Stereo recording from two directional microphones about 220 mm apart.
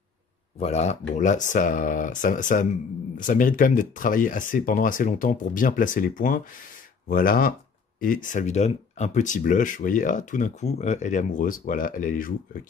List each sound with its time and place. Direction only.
0.6 s speech: 30° left (ahead or behind)